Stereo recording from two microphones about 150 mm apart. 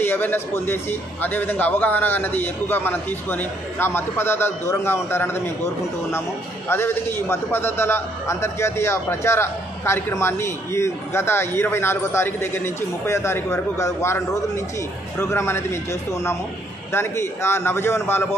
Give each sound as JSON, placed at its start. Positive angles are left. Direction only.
{"t": 0.0, "sound": "a man's voice", "side_deg": 15}
{"t": 6.7, "sound": "a man's voice", "side_deg": 15}